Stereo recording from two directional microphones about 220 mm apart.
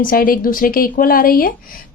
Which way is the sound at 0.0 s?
40° left (ahead or behind).